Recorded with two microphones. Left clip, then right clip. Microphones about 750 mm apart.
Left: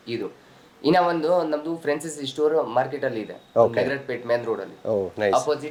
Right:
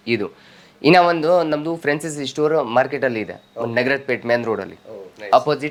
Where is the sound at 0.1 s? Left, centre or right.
Right.